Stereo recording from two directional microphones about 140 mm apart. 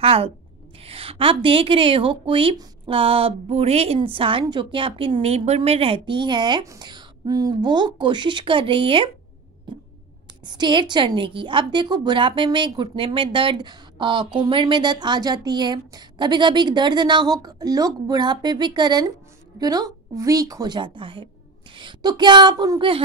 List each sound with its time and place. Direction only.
0.0 s a woman's voice: 45° right (ahead or behind)
10.4 s a woman's voice: 30° right (ahead or behind)